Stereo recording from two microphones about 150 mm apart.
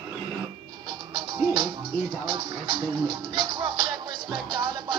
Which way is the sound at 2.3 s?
30° right (ahead or behind).